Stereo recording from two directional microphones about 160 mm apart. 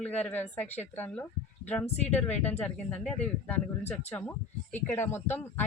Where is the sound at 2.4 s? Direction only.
10° left (ahead or behind).